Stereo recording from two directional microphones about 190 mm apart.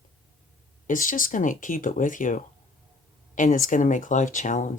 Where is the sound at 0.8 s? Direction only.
45° left (ahead or behind).